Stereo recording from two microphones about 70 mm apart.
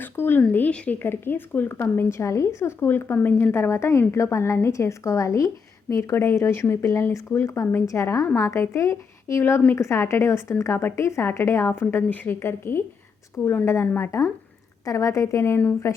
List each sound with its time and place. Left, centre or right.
0.0 s a woman's voice: left
3.5 s a woman's voice: left
12.4 s a woman's voice: left
13.8 s a woman's voice: left
14.8 s a woman's voice: left